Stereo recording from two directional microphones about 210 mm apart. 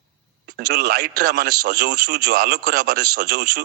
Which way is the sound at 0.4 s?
50° right (ahead or behind).